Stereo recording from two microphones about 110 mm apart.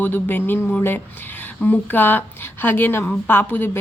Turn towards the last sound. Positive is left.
turn(degrees=20)  # may be behind; listen again after turning